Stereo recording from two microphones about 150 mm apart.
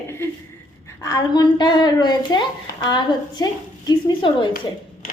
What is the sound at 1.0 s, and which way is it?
Speech, 25° left (ahead or behind).